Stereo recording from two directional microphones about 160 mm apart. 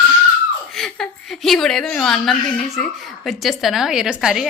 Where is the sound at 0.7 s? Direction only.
Centre (ahead or behind).